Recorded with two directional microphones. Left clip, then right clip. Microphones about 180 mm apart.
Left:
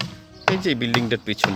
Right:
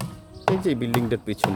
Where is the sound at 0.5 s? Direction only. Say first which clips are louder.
Left 2 dB; 5° right (ahead or behind).